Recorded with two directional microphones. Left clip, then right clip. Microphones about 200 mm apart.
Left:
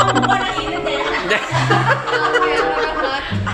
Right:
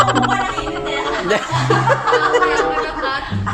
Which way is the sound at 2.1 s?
30° right (ahead or behind).